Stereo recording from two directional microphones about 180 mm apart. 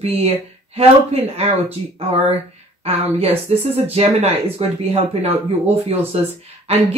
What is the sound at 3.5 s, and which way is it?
Speech, 35° right (ahead or behind).